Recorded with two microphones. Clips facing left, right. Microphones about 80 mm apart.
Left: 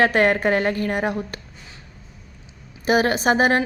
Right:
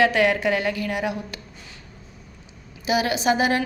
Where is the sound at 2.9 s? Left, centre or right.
Left.